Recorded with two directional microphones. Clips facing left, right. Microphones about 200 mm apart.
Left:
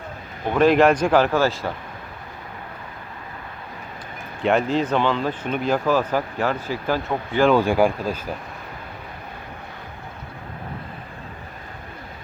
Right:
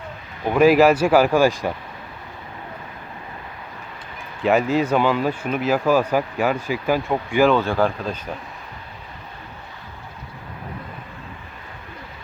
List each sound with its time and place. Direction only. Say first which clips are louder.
0.5 s speech: right 2 dB; 5° right (ahead or behind)
4.4 s speech: right 2 dB; 5° right (ahead or behind)
7.5 s speech: left 2 dB; 15° left (ahead or behind)